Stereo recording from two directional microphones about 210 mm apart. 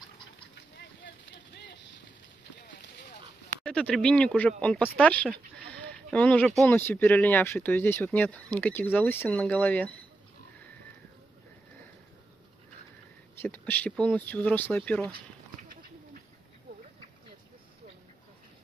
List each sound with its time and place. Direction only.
0.6 s vehicle: 55° left (ahead or behind)
3.6 s speech: 5° left (ahead or behind)
13.4 s speech: 10° left (ahead or behind)